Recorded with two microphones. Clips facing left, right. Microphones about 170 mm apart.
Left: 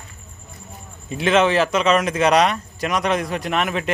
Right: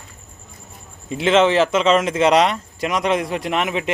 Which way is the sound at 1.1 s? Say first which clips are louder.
Right 2 dB; 20° right (ahead or behind).